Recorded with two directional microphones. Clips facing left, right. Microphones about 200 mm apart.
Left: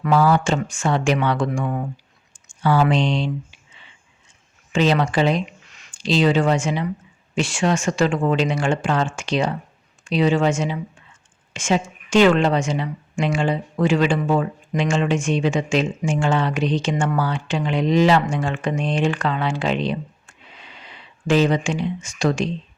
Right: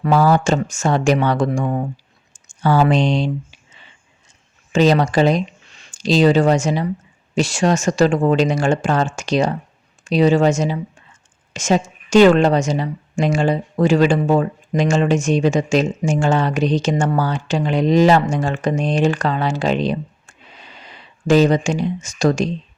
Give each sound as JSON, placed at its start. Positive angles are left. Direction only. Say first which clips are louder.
{"t": 0.0, "sound": "a woman's voice", "louder": "right 2 dB", "side_deg": -40}
{"t": 4.7, "sound": "a woman's voice", "louder": "right 4 dB", "side_deg": -40}